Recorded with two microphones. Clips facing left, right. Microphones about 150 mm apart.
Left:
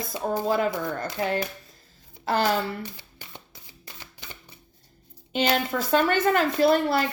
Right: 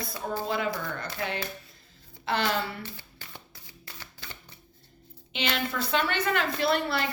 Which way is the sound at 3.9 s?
15° left (ahead or behind).